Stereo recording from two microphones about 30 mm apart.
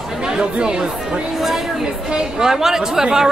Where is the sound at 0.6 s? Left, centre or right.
Right.